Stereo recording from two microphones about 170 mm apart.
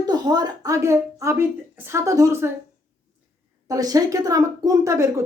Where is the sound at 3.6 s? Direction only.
20° right (ahead or behind).